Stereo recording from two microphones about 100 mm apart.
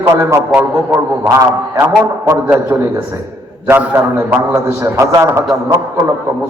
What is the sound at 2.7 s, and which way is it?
A man's voice, 25° right (ahead or behind).